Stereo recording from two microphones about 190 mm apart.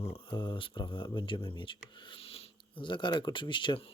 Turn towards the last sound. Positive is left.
turn(degrees=25)  # may be behind; listen again after turning